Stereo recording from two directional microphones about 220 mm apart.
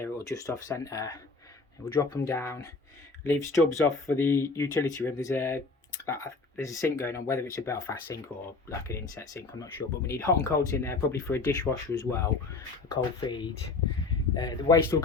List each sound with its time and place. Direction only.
0.0 s speech: 15° left (ahead or behind)